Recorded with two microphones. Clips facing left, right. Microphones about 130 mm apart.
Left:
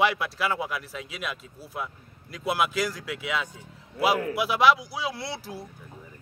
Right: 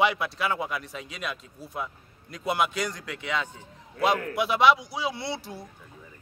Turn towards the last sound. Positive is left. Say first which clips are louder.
# right 1 dB
turn(degrees=0)  # may be behind; listen again after turning